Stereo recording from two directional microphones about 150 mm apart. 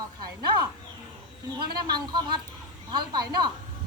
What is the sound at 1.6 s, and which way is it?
A woman's voice, 30° right (ahead or behind).